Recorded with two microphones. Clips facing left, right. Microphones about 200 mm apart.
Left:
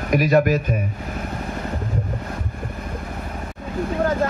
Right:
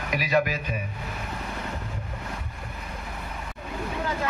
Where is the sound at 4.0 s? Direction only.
50° left (ahead or behind).